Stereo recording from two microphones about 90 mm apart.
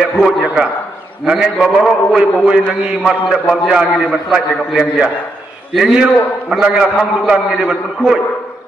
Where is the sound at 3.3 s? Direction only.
5° right (ahead or behind).